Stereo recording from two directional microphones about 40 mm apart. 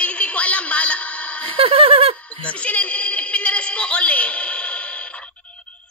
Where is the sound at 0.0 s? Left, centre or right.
Left.